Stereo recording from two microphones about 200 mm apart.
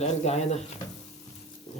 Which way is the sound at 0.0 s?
35° left (ahead or behind).